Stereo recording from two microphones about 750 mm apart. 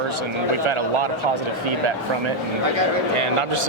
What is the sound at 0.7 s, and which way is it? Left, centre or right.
Speech, right.